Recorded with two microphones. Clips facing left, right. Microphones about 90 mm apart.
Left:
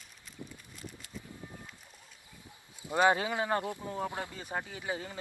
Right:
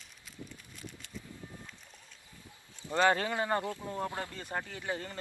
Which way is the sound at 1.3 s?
15° left (ahead or behind).